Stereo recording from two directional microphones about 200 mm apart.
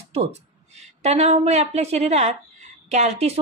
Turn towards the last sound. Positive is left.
turn(degrees=-30)  # may be behind; listen again after turning